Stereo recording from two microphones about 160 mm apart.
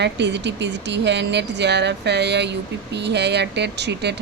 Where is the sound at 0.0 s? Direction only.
90° right.